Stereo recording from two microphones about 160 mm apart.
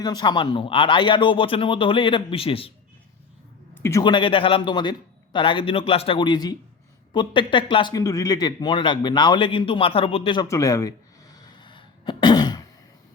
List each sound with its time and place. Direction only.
0.0 s speech: 25° left (ahead or behind)
3.8 s a man's voice: 15° left (ahead or behind)
4.0 s a man's voice: 30° left (ahead or behind)
10.5 s sneeze: 20° left (ahead or behind)